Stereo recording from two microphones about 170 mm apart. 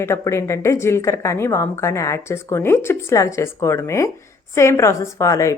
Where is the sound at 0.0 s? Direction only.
15° left (ahead or behind).